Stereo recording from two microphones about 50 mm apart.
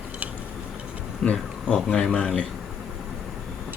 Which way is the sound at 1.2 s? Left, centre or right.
Left.